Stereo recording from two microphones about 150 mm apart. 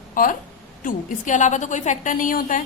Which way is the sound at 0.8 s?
55° left (ahead or behind).